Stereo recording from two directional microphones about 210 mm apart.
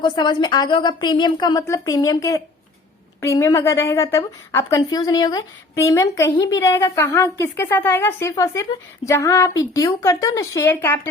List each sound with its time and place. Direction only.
0.0 s a woman's voice: 20° left (ahead or behind)